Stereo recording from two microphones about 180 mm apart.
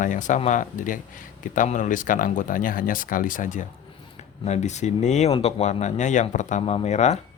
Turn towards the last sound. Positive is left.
turn(degrees=40)  # may be behind; listen again after turning